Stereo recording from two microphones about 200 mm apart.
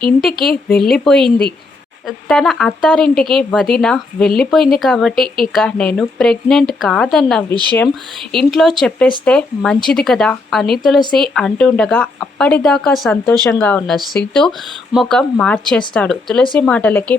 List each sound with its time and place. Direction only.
0.2 s speech: centre (ahead or behind)
7.5 s speech: 20° right (ahead or behind)
8.3 s speech: centre (ahead or behind)